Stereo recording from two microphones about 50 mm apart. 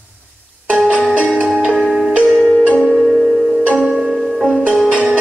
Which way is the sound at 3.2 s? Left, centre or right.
Centre.